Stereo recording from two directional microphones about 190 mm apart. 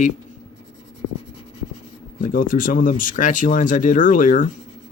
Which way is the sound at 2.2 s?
45° left (ahead or behind).